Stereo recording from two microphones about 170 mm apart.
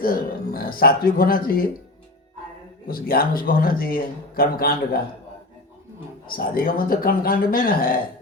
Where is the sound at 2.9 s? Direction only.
60° left (ahead or behind).